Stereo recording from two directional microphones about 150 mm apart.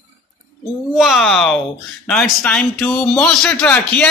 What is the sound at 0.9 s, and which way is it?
A man's voice, centre (ahead or behind).